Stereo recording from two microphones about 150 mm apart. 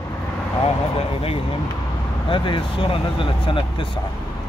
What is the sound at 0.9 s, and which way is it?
A man's voice, 40° left (ahead or behind).